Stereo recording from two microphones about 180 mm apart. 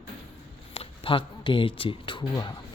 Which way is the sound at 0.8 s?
30° left (ahead or behind).